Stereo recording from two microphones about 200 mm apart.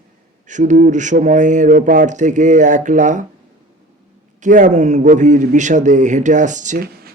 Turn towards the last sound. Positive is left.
turn(degrees=-50)  # may be behind; listen again after turning